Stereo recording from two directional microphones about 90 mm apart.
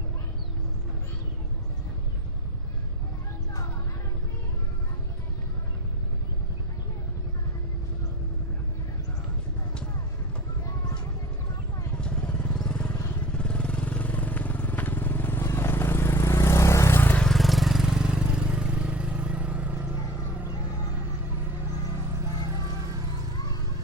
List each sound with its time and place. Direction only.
11.9 s vehicle: 10° left (ahead or behind)
17.2 s vehicle: 5° left (ahead or behind); by 19.9 s 15° right (ahead or behind)